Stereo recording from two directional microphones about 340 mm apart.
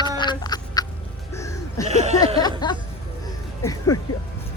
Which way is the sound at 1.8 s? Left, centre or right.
Centre.